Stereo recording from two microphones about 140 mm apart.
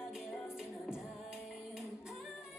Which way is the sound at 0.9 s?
Centre (ahead or behind).